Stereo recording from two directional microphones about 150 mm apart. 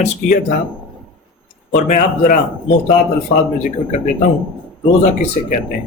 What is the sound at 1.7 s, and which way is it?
Speech, 55° left (ahead or behind).